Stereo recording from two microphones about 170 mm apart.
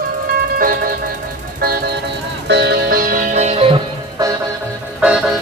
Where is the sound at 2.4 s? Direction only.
90° right.